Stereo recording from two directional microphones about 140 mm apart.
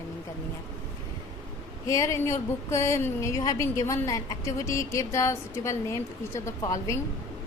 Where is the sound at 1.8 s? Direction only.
20° left (ahead or behind).